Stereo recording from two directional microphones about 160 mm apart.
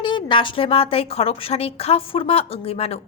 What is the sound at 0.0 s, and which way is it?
Speech, 30° left (ahead or behind).